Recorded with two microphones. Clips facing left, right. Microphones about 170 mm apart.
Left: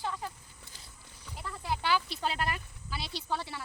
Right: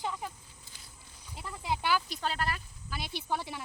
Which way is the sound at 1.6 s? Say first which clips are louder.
Right 1 dB; 10° right (ahead or behind).